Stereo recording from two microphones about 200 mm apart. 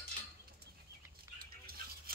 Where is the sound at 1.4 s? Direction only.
50° right (ahead or behind).